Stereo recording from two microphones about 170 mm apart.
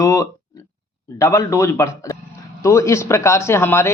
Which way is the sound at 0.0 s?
20° left (ahead or behind).